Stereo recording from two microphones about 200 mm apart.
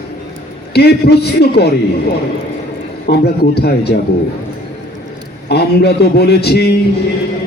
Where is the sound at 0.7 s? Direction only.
55° left (ahead or behind).